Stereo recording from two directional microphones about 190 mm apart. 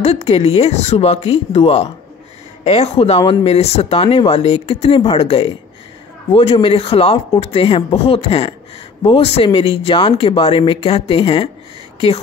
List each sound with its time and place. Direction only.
0.0 s speech: 35° left (ahead or behind)